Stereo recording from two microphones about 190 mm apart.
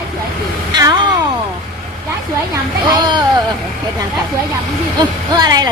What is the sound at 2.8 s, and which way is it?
Speech, 25° right (ahead or behind).